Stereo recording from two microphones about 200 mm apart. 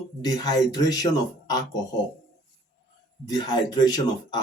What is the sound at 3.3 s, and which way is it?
Speech, 20° left (ahead or behind).